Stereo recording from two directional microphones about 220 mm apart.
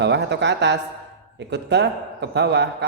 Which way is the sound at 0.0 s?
50° right (ahead or behind).